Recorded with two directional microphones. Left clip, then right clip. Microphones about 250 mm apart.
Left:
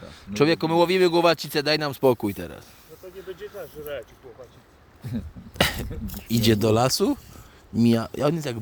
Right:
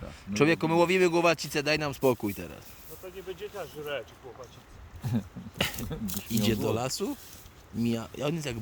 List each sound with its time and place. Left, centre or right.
0.0 s speech: centre
3.2 s speech: centre
5.5 s a sound: left
6.3 s speech: left